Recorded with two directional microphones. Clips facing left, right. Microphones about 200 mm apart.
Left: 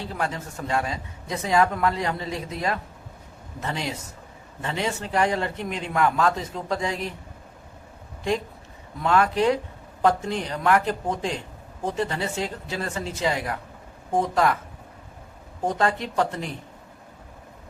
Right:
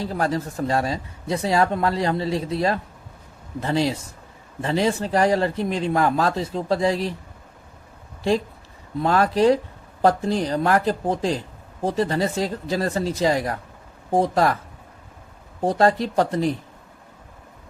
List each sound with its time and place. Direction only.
0.0 s speech: 40° right (ahead or behind)
9.0 s speech: 35° right (ahead or behind)
15.6 s speech: 35° right (ahead or behind)